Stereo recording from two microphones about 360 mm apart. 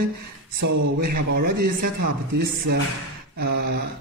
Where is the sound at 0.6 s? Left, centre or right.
Right.